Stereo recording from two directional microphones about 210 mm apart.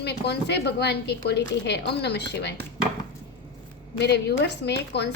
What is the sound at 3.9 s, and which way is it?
A woman's voice, 55° left (ahead or behind).